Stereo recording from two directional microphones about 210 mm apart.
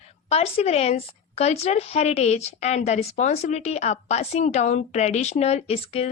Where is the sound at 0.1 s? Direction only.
30° left (ahead or behind).